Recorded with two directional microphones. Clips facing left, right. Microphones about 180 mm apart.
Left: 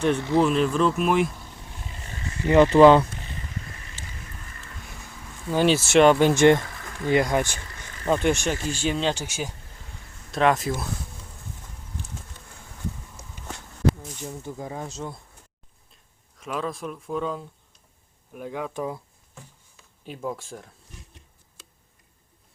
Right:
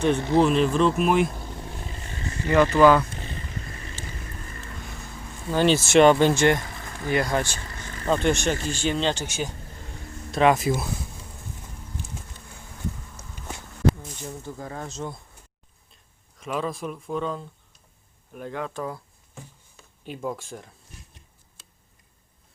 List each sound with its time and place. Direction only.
0.2 s speech: 45° right (ahead or behind)
0.4 s speech: centre (ahead or behind)
2.5 s speech: 25° left (ahead or behind)
5.5 s speech: 10° left (ahead or behind)
6.3 s speech: 20° left (ahead or behind)
6.6 s a sound: 20° right (ahead or behind)
7.0 s speech: 20° left (ahead or behind)
10.3 s speech: 5° right (ahead or behind)
14.4 s speech: 15° left (ahead or behind)
16.4 s speech: centre (ahead or behind); by 18.9 s 15° left (ahead or behind)
20.1 s speech: centre (ahead or behind)